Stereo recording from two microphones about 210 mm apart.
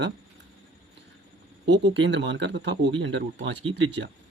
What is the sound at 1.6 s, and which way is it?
Speech, 60° right (ahead or behind).